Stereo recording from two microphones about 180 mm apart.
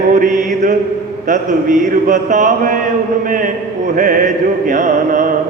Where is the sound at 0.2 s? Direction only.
45° right (ahead or behind).